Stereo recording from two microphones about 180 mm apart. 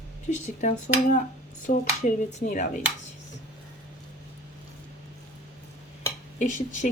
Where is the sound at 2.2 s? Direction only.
45° left (ahead or behind).